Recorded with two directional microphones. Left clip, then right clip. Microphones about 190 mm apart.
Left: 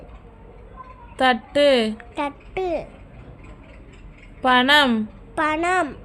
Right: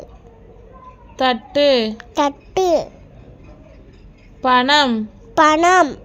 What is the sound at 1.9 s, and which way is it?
Speech, 30° right (ahead or behind).